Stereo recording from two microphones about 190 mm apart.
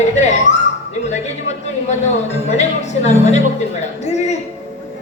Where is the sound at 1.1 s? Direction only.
35° left (ahead or behind).